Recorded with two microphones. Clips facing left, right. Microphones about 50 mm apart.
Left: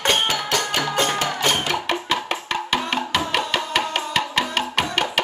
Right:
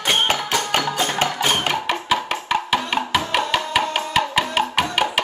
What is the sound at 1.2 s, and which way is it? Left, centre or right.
Music, right.